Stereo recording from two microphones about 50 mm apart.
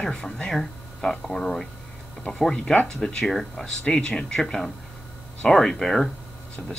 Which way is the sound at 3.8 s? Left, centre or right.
Centre.